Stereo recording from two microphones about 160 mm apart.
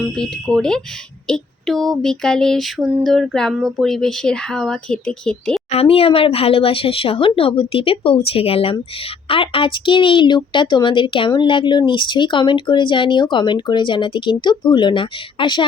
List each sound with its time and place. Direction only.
0.2 s speech: 5° left (ahead or behind)
5.7 s a woman's voice: 40° left (ahead or behind)